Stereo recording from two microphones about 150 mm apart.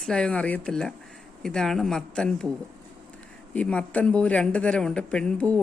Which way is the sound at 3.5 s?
10° left (ahead or behind).